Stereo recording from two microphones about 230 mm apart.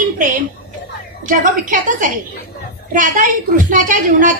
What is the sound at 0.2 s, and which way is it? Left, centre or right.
A woman's voice, right.